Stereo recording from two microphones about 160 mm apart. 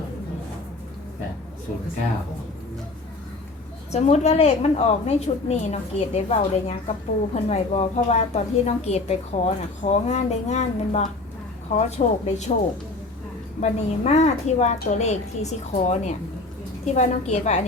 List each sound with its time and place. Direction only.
3.9 s a woman's voice: 45° left (ahead or behind)
13.6 s a woman's voice: 45° left (ahead or behind)